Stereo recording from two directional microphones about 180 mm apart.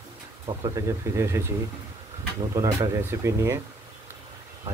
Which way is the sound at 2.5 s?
15° right (ahead or behind).